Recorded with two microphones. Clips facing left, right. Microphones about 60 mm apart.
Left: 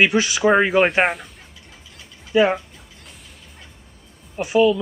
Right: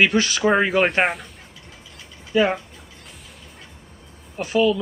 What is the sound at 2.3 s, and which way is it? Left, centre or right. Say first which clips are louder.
Speech: left 2 dB; centre.